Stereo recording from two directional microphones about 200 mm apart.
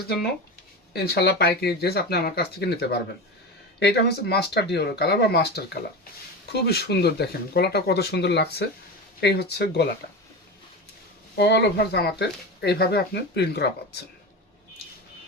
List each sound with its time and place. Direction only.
0.9 s speech: 55° left (ahead or behind)
11.3 s speech: 60° left (ahead or behind)